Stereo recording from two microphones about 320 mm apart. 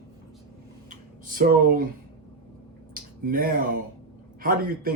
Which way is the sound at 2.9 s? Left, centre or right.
Right.